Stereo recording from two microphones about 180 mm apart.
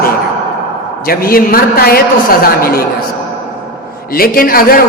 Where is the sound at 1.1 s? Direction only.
55° left (ahead or behind).